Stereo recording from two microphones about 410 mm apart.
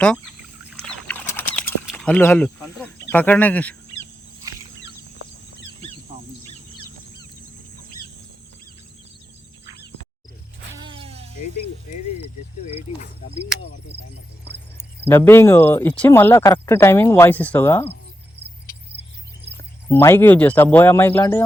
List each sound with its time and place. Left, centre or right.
0.7 s rodents: centre
1.9 s speech: centre
6.5 s bird: centre
10.8 s a sound: centre
12.6 s speech: centre
15.0 s speech: centre
19.9 s speech: centre